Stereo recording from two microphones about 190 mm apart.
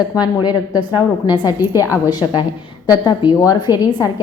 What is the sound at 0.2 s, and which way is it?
A woman's voice, 20° left (ahead or behind).